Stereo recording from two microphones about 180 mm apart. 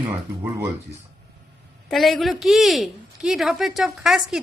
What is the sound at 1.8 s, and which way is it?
A woman's voice, centre (ahead or behind).